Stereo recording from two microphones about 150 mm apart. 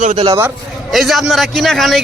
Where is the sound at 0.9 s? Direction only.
Centre (ahead or behind).